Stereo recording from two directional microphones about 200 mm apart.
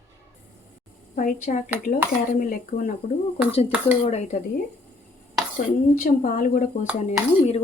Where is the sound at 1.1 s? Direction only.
40° left (ahead or behind).